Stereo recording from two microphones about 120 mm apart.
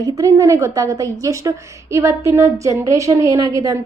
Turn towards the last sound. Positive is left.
turn(degrees=-30)  # may be behind; listen again after turning